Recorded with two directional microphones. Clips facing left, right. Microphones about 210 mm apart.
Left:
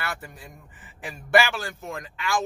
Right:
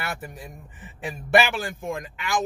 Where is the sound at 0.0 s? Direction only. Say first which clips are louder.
Right 2 dB; 20° right (ahead or behind).